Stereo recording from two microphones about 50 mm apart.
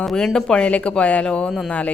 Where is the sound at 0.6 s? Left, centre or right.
Left.